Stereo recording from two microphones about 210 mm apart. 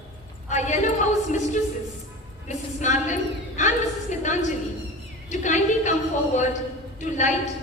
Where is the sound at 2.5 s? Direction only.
35° left (ahead or behind).